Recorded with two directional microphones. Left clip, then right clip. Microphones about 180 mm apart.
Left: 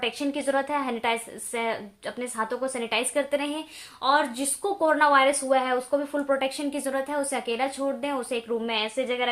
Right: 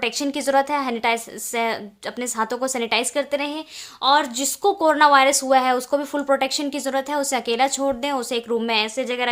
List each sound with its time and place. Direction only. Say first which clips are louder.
0.0 s speech: right 4 dB; 35° right (ahead or behind)